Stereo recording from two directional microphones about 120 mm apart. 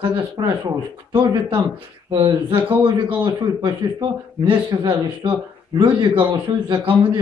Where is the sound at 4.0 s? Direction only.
40° right (ahead or behind).